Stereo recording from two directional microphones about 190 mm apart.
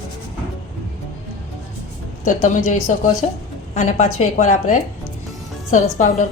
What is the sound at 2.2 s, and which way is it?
A woman's voice, 45° left (ahead or behind).